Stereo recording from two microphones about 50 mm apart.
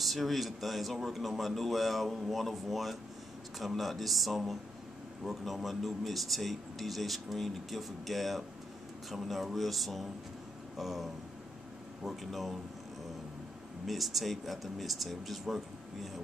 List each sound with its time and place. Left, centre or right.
0.0 s speech: centre
13.8 s speech: centre